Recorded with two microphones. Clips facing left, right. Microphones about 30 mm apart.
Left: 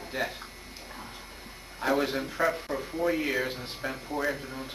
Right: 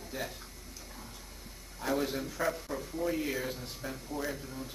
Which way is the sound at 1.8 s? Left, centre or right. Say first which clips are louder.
Left 5 dB; left.